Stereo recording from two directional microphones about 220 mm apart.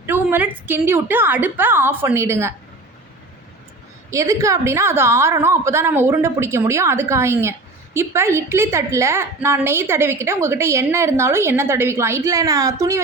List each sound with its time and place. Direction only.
0.0 s a woman's voice: 10° right (ahead or behind)
4.1 s a woman's voice: 15° right (ahead or behind)